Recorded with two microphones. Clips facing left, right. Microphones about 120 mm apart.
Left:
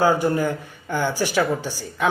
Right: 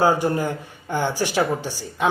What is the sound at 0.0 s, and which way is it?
Speech, 30° right (ahead or behind).